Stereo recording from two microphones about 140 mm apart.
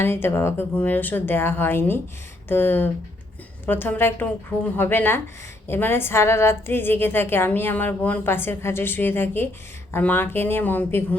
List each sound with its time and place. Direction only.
0.0 s a woman's voice: 15° left (ahead or behind)